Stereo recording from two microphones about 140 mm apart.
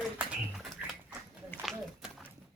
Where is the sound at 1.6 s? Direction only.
5° right (ahead or behind).